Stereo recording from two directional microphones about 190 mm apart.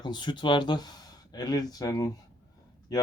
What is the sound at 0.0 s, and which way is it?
Speech, 25° left (ahead or behind).